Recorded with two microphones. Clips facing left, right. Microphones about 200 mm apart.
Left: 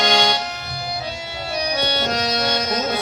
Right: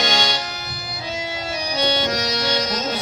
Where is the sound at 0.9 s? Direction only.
60° left (ahead or behind).